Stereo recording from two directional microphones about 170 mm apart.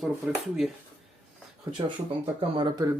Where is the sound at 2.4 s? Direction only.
25° right (ahead or behind).